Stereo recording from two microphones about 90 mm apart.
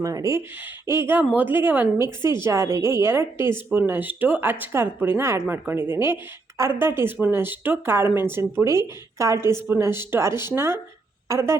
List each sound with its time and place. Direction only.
0.0 s speech: 40° right (ahead or behind)
0.9 s a woman's voice: 25° right (ahead or behind)
1.2 s a woman's voice: 15° right (ahead or behind); by 11.5 s 30° right (ahead or behind)